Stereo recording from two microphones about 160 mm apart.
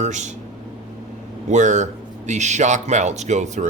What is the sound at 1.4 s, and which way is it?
Speech, 50° right (ahead or behind).